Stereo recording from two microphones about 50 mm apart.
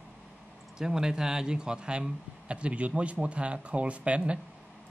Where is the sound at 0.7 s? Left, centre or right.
Centre.